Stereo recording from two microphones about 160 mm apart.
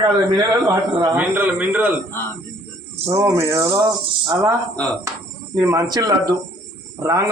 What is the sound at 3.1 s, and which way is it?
Speech, 20° right (ahead or behind).